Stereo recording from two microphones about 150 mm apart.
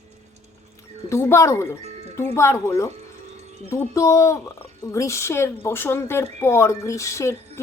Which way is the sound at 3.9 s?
20° left (ahead or behind).